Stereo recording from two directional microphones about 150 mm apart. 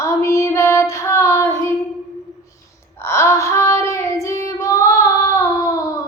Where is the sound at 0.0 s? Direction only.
20° left (ahead or behind).